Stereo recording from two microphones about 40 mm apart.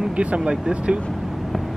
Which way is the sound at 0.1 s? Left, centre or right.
Right.